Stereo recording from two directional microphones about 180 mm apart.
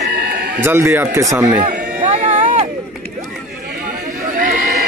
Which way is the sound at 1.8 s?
40° right (ahead or behind).